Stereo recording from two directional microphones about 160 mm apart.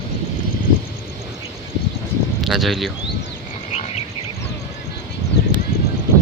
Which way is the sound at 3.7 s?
45° left (ahead or behind).